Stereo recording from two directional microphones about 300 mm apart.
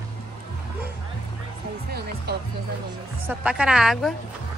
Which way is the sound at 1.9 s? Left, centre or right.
Right.